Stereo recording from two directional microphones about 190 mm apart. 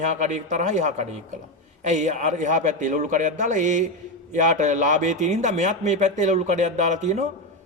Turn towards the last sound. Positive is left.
turn(degrees=-40)  # may be behind; listen again after turning